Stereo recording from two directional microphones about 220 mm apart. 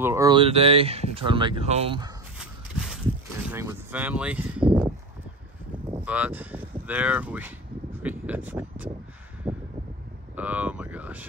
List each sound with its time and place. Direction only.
0.0 s speech: 15° right (ahead or behind)
2.3 s horse: centre (ahead or behind)
3.4 s speech: 10° right (ahead or behind)
6.0 s speech: 5° right (ahead or behind)
9.5 s a sound: 5° right (ahead or behind)
10.3 s speech: 5° right (ahead or behind)